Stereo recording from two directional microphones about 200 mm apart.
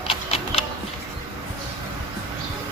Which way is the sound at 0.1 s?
30° left (ahead or behind).